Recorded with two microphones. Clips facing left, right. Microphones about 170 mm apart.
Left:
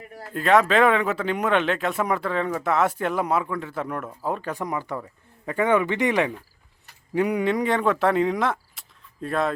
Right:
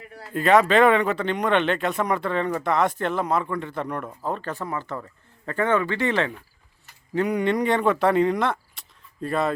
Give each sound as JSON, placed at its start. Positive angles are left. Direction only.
{"t": 0.3, "sound": "speech", "side_deg": 0}